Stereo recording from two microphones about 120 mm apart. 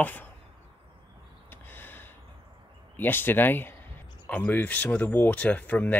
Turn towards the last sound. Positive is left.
turn(degrees=15)  # may be behind; listen again after turning